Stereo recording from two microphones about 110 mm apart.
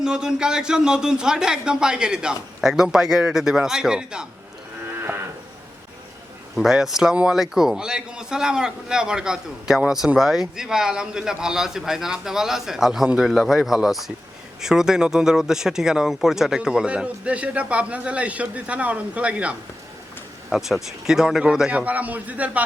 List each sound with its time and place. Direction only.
0.0 s speech: 5° right (ahead or behind)
4.9 s moo: 20° right (ahead or behind)
6.6 s a man's voice: 5° right (ahead or behind)